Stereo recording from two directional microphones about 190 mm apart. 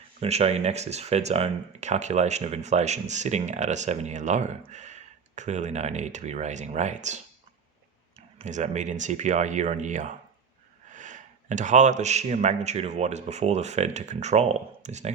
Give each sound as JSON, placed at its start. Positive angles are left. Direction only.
{"t": 0.2, "sound": "speech", "side_deg": -35}
{"t": 8.4, "sound": "speech", "side_deg": -40}